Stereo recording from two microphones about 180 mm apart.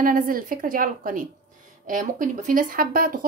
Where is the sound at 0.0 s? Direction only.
50° right (ahead or behind).